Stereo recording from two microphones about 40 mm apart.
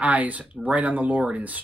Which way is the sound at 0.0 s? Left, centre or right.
Right.